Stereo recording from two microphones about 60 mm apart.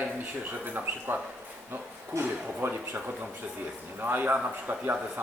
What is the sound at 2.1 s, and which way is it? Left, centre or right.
Speech, right.